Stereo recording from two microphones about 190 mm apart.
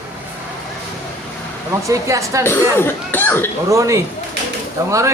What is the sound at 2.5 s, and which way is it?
Speech, 10° left (ahead or behind).